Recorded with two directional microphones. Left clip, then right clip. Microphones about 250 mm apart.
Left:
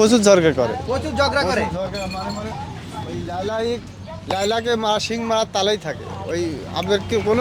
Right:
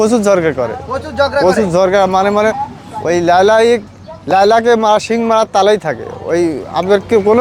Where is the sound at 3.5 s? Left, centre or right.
Right.